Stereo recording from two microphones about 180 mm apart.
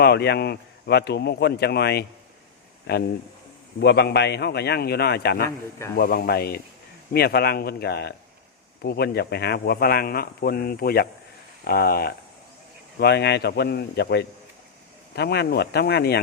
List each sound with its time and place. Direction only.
0.0 s speech: 65° left (ahead or behind)